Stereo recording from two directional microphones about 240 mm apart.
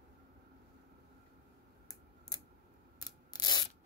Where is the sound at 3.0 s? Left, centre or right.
Centre.